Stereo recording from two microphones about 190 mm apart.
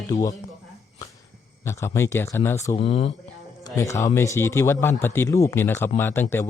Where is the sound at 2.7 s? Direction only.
30° left (ahead or behind).